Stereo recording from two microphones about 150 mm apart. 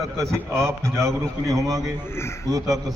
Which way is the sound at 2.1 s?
15° left (ahead or behind).